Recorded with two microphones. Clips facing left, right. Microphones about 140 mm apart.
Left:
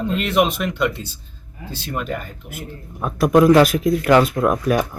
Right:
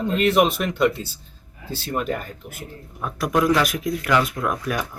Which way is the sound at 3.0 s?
25° left (ahead or behind).